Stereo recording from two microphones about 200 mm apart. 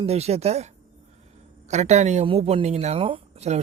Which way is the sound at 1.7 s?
35° right (ahead or behind).